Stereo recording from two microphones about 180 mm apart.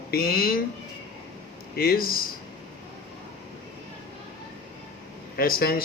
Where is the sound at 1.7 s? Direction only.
55° left (ahead or behind).